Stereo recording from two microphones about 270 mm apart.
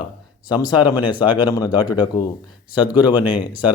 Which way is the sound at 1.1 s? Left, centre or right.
Centre.